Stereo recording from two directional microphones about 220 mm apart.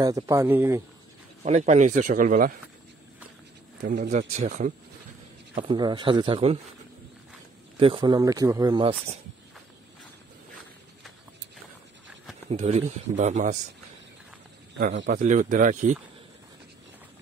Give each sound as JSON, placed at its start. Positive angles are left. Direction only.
{"t": 0.0, "sound": "speech", "side_deg": -15}
{"t": 1.4, "sound": "speech", "side_deg": -30}
{"t": 3.8, "sound": "speech", "side_deg": -35}
{"t": 5.5, "sound": "speech", "side_deg": -20}
{"t": 7.8, "sound": "speech", "side_deg": -20}
{"t": 12.4, "sound": "speech", "side_deg": -30}
{"t": 15.0, "sound": "speech", "side_deg": -35}